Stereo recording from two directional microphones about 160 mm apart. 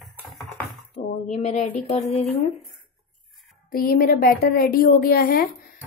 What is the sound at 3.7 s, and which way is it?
Speech, 65° left (ahead or behind).